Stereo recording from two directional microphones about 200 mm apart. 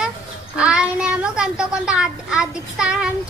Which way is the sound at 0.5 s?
5° right (ahead or behind).